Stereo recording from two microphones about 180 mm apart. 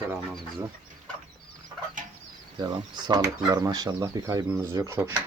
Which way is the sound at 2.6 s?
25° right (ahead or behind).